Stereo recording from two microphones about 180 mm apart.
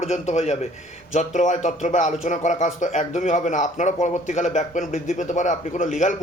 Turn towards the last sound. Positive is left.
turn(degrees=45)  # may be behind; listen again after turning